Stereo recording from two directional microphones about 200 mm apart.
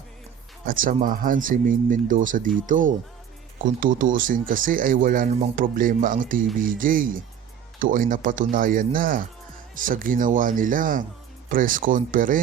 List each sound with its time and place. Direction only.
0.6 s speech: 45° right (ahead or behind)